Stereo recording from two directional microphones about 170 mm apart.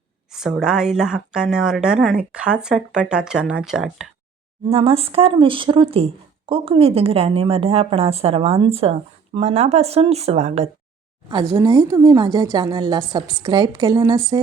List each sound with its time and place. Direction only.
0.3 s a woman's voice: centre (ahead or behind)
4.7 s speech: 35° right (ahead or behind)
11.3 s a woman's voice: 20° right (ahead or behind)